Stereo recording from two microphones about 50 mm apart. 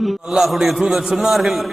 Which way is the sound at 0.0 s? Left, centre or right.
Centre.